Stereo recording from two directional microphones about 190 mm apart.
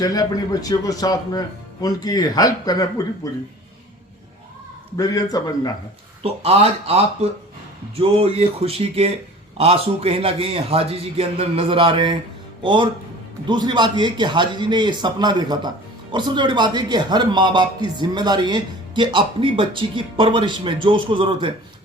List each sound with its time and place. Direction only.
0.0 s speech: 20° left (ahead or behind)
4.9 s speech: 20° left (ahead or behind)
6.2 s a man's voice: 30° right (ahead or behind)